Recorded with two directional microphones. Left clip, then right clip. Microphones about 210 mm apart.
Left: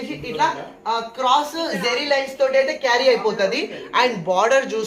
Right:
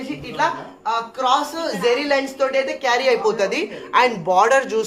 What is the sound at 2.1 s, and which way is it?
A woman's voice, 35° right (ahead or behind).